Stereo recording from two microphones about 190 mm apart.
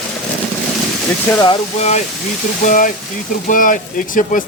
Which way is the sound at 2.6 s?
45° left (ahead or behind).